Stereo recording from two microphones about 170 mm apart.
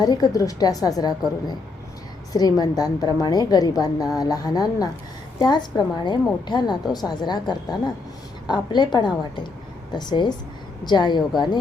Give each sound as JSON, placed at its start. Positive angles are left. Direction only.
{"t": 0.0, "sound": "a woman's voice", "side_deg": 20}
{"t": 2.3, "sound": "a woman's voice", "side_deg": 20}